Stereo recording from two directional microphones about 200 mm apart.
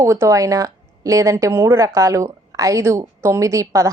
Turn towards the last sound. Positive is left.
turn(degrees=-15)  # may be behind; listen again after turning